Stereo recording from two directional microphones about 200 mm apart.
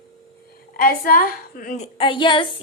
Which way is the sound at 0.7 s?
45° left (ahead or behind).